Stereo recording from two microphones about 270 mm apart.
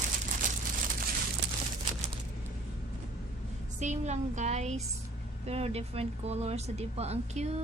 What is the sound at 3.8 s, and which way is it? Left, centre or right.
Speech, right.